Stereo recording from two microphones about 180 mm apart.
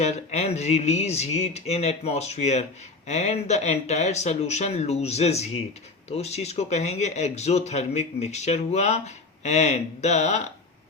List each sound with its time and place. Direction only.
0.0 s speech: 35° left (ahead or behind)